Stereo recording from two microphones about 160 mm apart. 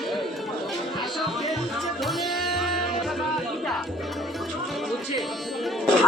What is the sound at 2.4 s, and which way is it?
Music, centre (ahead or behind).